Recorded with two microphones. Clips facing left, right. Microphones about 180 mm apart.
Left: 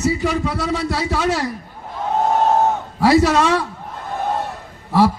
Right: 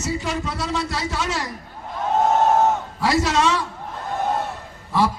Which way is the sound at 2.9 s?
60° left (ahead or behind).